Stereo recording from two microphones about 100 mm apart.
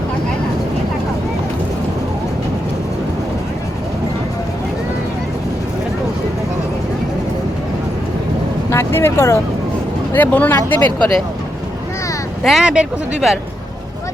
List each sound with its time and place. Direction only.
8.7 s speech: 25° left (ahead or behind)
12.4 s speech: centre (ahead or behind)